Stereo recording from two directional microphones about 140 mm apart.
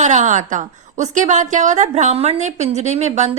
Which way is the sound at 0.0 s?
60° right (ahead or behind).